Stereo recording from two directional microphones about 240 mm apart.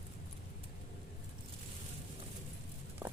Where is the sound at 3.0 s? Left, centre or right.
Centre.